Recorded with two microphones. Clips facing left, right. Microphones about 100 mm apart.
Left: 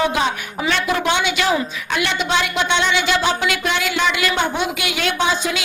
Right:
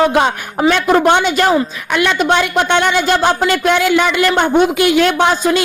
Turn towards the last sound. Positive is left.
turn(degrees=-50)  # may be behind; listen again after turning